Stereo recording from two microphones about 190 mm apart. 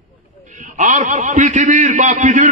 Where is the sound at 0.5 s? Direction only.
40° right (ahead or behind).